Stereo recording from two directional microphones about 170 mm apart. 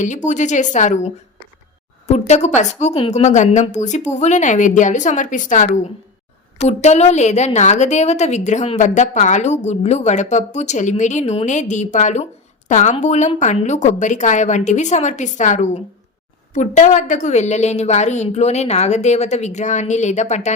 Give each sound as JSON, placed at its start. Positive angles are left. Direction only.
{"t": 0.0, "sound": "a woman's voice", "side_deg": 45}